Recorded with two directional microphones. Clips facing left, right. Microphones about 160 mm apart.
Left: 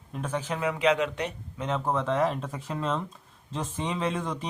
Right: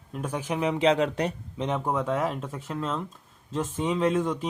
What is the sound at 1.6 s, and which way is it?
Speech, 15° right (ahead or behind).